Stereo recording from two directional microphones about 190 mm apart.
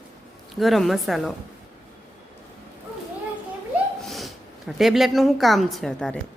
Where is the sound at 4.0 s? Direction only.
Centre (ahead or behind).